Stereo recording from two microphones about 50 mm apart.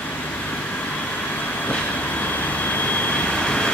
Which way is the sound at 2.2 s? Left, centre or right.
Left.